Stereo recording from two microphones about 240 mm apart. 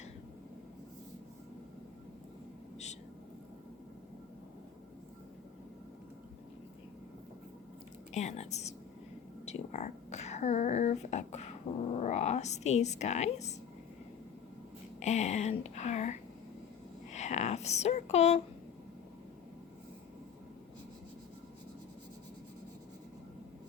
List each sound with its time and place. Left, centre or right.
8.1 s speech: left
15.0 s speech: left
17.1 s a sound: left